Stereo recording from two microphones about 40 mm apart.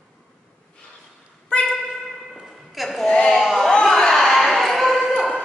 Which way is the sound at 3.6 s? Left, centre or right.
Centre.